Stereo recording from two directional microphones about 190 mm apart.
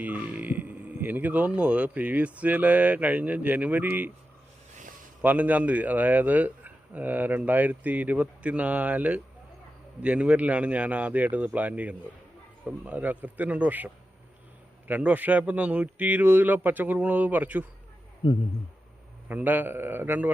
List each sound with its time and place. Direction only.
0.0 s speech: 10° right (ahead or behind)
5.2 s speech: 10° right (ahead or behind)
18.2 s speech: 25° left (ahead or behind)
19.3 s speech: 10° right (ahead or behind)